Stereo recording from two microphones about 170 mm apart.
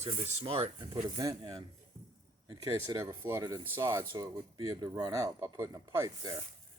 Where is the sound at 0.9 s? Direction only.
20° right (ahead or behind).